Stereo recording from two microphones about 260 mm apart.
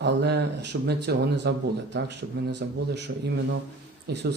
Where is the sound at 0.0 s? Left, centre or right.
Right.